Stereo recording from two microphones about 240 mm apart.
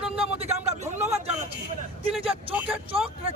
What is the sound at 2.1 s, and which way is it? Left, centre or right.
Speech, centre.